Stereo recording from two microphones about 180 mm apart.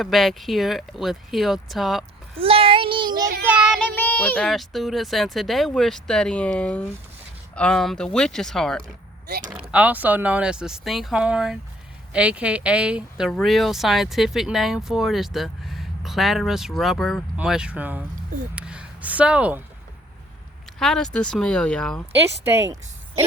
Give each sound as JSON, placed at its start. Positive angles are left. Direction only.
{"t": 0.0, "sound": "speech", "side_deg": 0}
{"t": 2.4, "sound": "child singing", "side_deg": -30}
{"t": 3.8, "sound": "speech", "side_deg": 10}
{"t": 9.7, "sound": "speech", "side_deg": -10}
{"t": 20.7, "sound": "speech", "side_deg": 5}
{"t": 22.4, "sound": "speech", "side_deg": -15}